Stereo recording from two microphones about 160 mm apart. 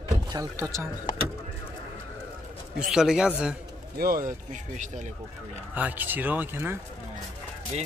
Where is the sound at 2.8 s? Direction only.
5° right (ahead or behind).